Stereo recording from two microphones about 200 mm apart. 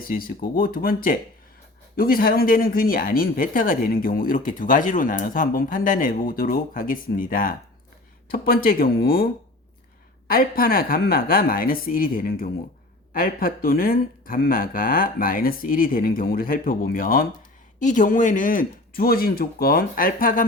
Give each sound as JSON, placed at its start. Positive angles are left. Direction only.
{"t": 0.0, "sound": "speech", "side_deg": 45}